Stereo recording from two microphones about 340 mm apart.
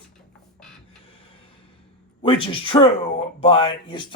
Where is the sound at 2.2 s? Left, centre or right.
Centre.